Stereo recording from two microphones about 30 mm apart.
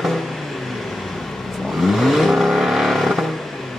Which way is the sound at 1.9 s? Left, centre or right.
Centre.